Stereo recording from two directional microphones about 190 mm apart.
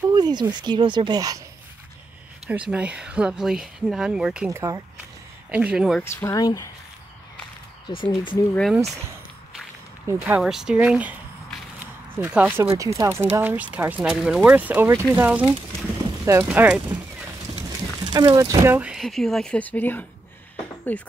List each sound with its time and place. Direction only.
0.1 s speech: 20° right (ahead or behind)
2.4 s speech: 5° right (ahead or behind)
4.5 s speech: 15° right (ahead or behind)
5.5 s speech: 5° right (ahead or behind)
6.0 s speech: 15° left (ahead or behind)
7.9 s speech: 25° left (ahead or behind)
10.0 s speech: 10° right (ahead or behind)
12.2 s speech: 10° right (ahead or behind)
18.0 s speech: 20° right (ahead or behind); by 21.0 s 10° left (ahead or behind)